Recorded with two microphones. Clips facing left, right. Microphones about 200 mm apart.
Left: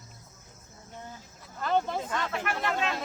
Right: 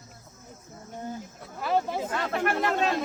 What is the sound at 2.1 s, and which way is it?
Chatter, 45° right (ahead or behind).